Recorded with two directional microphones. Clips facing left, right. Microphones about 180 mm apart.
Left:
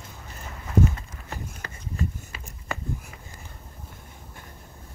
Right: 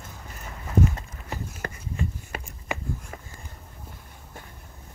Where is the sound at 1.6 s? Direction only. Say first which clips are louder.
Even; 50° right (ahead or behind).